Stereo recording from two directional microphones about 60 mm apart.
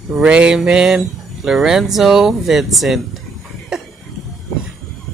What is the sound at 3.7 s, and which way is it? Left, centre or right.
Cough, centre.